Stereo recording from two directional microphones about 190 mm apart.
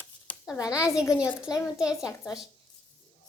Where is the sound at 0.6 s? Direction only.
20° left (ahead or behind).